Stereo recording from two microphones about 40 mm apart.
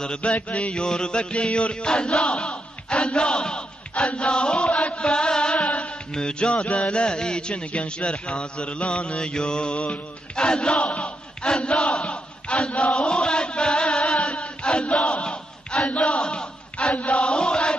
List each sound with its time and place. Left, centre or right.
0.0 s a man's voice: left
0.8 s chant: left
6.1 s a man's voice: left
6.5 s a man's voice: left
11.4 s chant: left
15.9 s a sound: left
16.9 s chant: left